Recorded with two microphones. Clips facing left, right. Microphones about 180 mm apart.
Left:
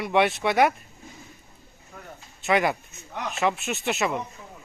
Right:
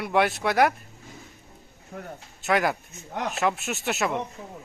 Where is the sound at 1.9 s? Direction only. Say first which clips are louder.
Right 7 dB; 55° right (ahead or behind).